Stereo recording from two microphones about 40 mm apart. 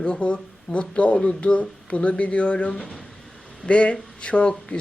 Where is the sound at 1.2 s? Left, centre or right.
Centre.